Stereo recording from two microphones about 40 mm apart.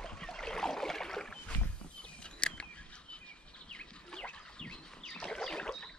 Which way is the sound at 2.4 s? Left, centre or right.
Left.